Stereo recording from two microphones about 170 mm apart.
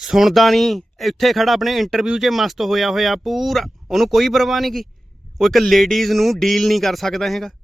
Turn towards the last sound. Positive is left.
turn(degrees=0)  # may be behind; listen again after turning